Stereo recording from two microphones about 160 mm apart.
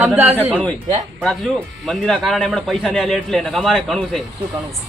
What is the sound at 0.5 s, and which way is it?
A man's voice, 5° left (ahead or behind).